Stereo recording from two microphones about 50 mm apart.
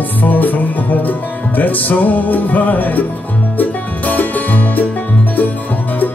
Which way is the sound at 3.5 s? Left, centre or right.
Left.